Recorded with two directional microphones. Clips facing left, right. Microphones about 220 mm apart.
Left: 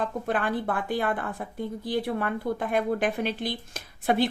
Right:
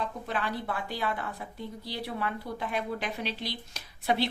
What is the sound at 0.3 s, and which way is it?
A woman's voice, 50° left (ahead or behind).